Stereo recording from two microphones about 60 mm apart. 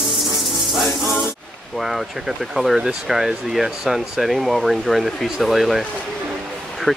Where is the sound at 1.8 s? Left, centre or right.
Centre.